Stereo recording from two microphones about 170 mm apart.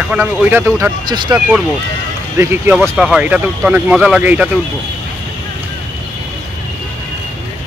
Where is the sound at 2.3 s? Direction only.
15° right (ahead or behind).